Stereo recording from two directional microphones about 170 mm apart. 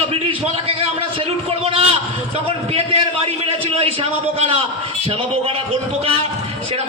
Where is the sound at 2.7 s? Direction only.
35° right (ahead or behind).